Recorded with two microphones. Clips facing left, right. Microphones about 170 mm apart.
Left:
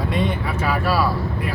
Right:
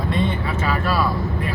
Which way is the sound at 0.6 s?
10° left (ahead or behind).